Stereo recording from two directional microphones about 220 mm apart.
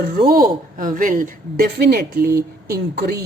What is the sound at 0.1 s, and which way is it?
A woman's voice, 40° right (ahead or behind).